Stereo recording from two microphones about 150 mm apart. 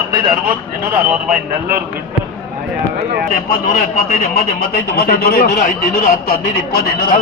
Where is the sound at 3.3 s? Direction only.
70° left (ahead or behind).